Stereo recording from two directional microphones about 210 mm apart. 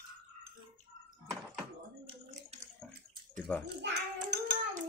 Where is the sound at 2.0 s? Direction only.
30° right (ahead or behind).